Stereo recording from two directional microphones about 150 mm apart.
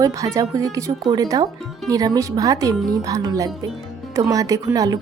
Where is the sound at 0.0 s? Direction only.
20° right (ahead or behind).